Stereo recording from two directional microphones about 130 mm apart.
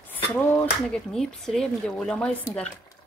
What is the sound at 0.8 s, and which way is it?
Speech, 5° left (ahead or behind).